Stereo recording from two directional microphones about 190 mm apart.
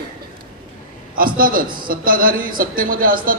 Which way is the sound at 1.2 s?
50° right (ahead or behind).